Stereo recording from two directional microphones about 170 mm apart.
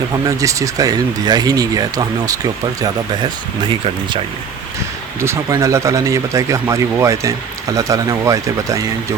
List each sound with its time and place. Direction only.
0.3 s speech: 20° right (ahead or behind)
5.2 s speech: 15° right (ahead or behind)